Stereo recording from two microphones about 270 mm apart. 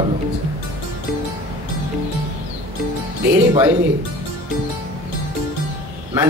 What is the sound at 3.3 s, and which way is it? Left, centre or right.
Speech, centre.